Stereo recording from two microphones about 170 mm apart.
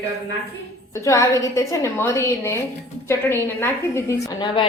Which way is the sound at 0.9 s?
20° left (ahead or behind).